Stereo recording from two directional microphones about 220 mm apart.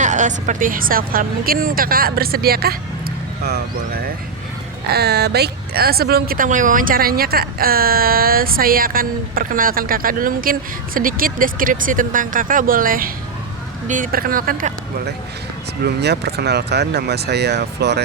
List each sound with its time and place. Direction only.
0.0 s speech: 35° right (ahead or behind); by 18.0 s 50° right (ahead or behind)